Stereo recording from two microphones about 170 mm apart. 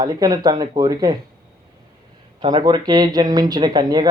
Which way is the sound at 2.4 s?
25° right (ahead or behind).